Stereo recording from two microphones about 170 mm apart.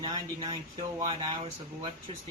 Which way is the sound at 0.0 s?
25° right (ahead or behind).